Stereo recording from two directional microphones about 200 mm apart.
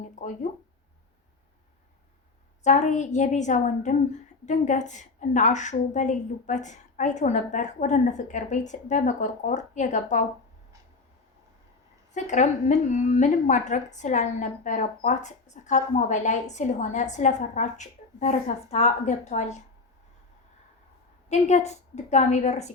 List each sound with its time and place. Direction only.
0.0 s a sound: 40° left (ahead or behind)
2.6 s a woman's voice: 35° left (ahead or behind)
12.1 s a woman's voice: 35° left (ahead or behind)
21.2 s a woman's voice: 35° left (ahead or behind)